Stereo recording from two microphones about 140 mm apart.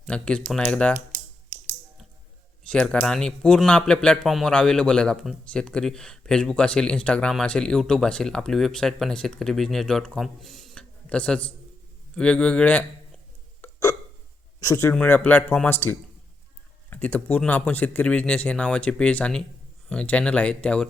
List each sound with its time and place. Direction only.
0.1 s speech: 10° left (ahead or behind)
2.6 s speech: 5° left (ahead or behind)
13.6 s hiccup: 20° left (ahead or behind)
14.6 s a man's voice: 20° left (ahead or behind)